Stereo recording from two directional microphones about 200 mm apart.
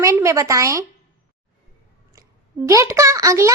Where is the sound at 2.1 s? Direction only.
15° right (ahead or behind).